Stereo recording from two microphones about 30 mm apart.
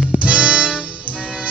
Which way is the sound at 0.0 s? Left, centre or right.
Right.